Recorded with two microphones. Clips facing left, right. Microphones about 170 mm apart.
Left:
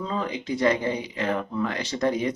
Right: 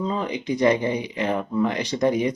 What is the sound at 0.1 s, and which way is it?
Speech, 15° right (ahead or behind).